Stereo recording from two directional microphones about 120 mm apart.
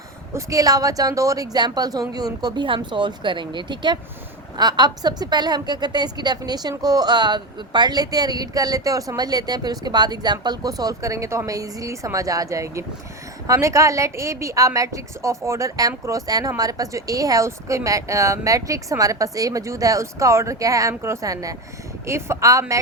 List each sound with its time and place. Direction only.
0.3 s a woman's voice: 30° right (ahead or behind)